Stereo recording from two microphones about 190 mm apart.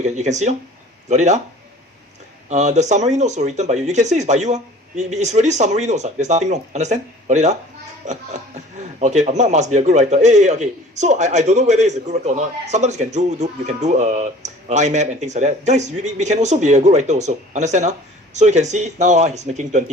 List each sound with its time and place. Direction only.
0.0 s speech: 40° right (ahead or behind)
2.5 s speech: 35° right (ahead or behind)